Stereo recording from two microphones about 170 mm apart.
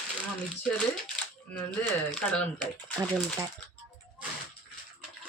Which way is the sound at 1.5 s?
10° left (ahead or behind).